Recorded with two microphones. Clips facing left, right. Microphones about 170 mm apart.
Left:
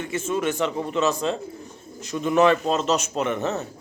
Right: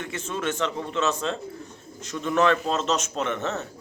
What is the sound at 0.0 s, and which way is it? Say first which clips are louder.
A man's voice: left 5 dB; 10° left (ahead or behind).